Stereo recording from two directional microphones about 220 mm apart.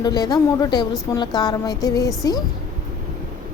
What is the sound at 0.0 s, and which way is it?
A woman's voice, 20° left (ahead or behind).